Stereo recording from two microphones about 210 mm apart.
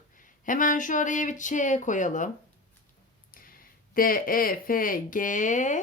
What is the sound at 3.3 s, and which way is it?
Speech, 40° left (ahead or behind).